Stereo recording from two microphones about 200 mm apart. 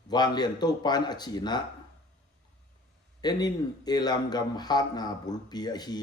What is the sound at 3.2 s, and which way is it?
Speech, 20° left (ahead or behind).